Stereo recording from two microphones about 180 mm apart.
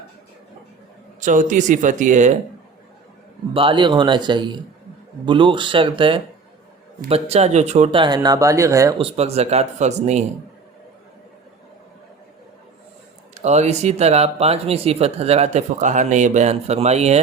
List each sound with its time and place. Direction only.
1.2 s speech: 45° right (ahead or behind)
3.5 s speech: 30° right (ahead or behind)
9.0 s speech: 35° right (ahead or behind)
13.3 s speech: 40° right (ahead or behind)